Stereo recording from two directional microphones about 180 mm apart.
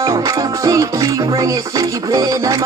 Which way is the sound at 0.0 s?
15° right (ahead or behind).